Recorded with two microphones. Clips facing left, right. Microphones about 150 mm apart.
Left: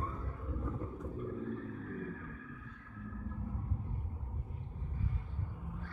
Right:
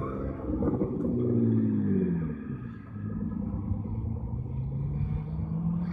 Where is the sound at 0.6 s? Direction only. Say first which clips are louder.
Right 15 dB; 60° right (ahead or behind).